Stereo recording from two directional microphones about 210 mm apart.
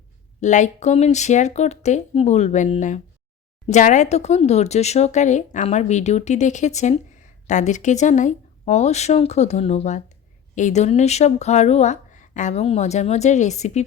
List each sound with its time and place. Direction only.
0.3 s speech: 35° left (ahead or behind)